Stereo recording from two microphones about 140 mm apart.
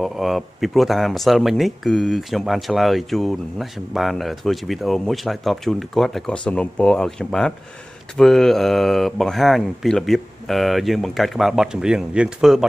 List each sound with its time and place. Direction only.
0.0 s speech: centre (ahead or behind)